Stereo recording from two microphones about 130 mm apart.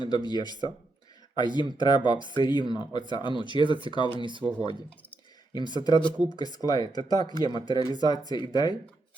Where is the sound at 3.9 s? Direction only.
35° left (ahead or behind).